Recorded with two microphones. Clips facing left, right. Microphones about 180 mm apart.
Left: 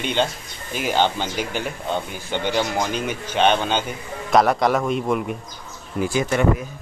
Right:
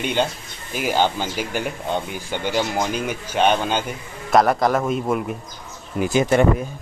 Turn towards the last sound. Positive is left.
turn(degrees=-20)  # may be behind; listen again after turning